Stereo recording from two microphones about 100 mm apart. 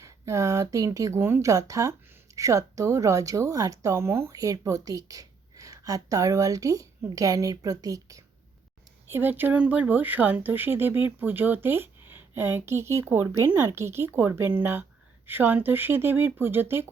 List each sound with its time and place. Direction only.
0.0 s speech: 30° right (ahead or behind)
9.0 s speech: 20° right (ahead or behind)